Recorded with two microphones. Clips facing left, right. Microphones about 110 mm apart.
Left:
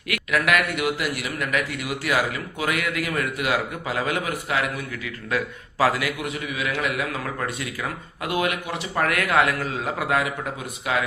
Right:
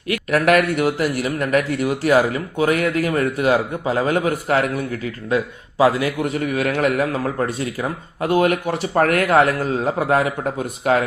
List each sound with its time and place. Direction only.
0.1 s speech: 40° right (ahead or behind)
5.3 s a man's voice: 25° right (ahead or behind)
6.1 s speech: 40° right (ahead or behind)